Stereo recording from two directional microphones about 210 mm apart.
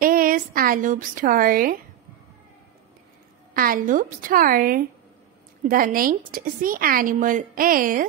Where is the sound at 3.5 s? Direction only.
40° right (ahead or behind).